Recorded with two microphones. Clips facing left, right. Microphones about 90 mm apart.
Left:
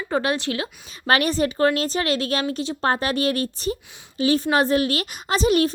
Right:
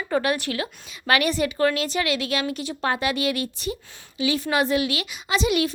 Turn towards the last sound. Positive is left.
turn(degrees=40)  # may be behind; listen again after turning